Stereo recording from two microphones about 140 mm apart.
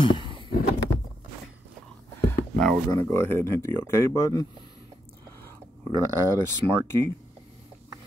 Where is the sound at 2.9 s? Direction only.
15° left (ahead or behind).